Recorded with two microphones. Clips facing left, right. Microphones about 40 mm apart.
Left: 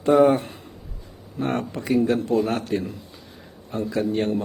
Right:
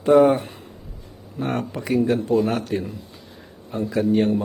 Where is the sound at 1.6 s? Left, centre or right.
Centre.